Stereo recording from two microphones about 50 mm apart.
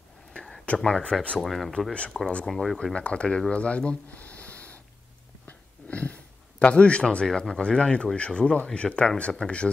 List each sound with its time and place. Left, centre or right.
0.3 s a sound: centre
0.7 s a man's voice: centre
1.4 s speech: centre
2.8 s speech: left
5.5 s a sound: left
6.6 s a man's voice: left